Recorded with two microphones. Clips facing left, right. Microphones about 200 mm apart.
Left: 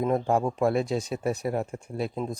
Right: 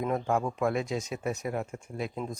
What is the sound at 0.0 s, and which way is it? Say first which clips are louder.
Speech: left 4 dB; 35° left (ahead or behind).